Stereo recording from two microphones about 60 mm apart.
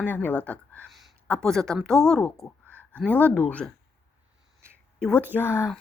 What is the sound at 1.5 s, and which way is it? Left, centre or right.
Speech, centre.